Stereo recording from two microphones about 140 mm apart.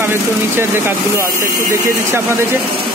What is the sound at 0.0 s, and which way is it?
Speech, 15° right (ahead or behind).